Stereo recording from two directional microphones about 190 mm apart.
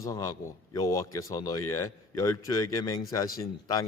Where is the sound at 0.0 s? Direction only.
15° left (ahead or behind).